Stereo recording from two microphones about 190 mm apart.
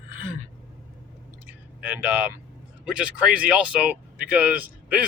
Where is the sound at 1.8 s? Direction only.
10° right (ahead or behind).